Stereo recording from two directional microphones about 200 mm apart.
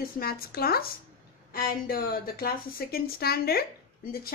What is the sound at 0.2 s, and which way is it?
A woman's voice, 50° left (ahead or behind).